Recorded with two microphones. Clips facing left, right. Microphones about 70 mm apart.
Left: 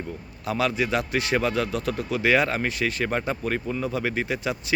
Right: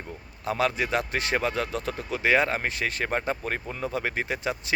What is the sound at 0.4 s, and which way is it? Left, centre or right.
Speech, right.